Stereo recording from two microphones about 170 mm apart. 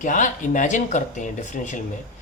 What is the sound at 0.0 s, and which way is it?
Speech, 50° left (ahead or behind).